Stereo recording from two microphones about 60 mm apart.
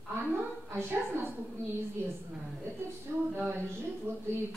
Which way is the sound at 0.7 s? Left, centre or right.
Right.